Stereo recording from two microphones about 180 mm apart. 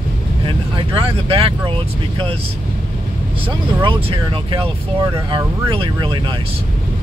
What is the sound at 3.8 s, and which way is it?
Speech, 30° right (ahead or behind).